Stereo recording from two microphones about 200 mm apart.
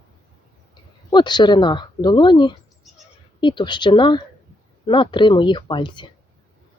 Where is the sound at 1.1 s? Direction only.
20° left (ahead or behind).